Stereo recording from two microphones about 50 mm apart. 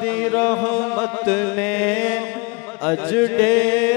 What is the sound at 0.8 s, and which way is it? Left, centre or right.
Music, left.